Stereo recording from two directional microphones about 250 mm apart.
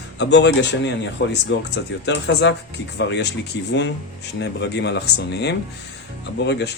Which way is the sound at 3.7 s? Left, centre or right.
Left.